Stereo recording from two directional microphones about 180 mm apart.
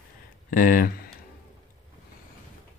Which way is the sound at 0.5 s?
50° left (ahead or behind).